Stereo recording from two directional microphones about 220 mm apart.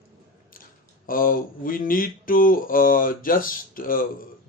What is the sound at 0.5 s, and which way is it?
Speech, 40° left (ahead or behind).